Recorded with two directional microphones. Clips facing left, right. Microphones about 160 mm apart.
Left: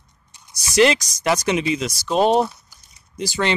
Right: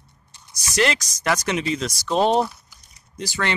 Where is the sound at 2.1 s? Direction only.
15° left (ahead or behind).